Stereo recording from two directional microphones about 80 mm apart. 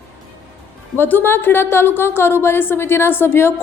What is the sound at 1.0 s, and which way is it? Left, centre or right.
A woman's voice, left.